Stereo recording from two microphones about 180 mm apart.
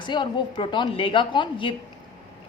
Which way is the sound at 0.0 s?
25° left (ahead or behind).